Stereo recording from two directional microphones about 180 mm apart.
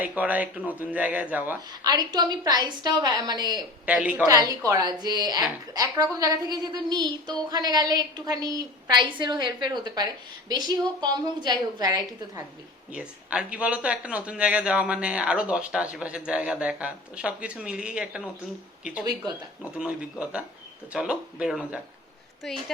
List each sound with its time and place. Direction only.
0.0 s speech: 10° right (ahead or behind)
1.7 s a woman's voice: 20° right (ahead or behind)
3.9 s speech: 10° right (ahead or behind)
4.3 s a woman's voice: 20° right (ahead or behind)
12.9 s speech: 5° right (ahead or behind)
19.7 s speech: 5° right (ahead or behind)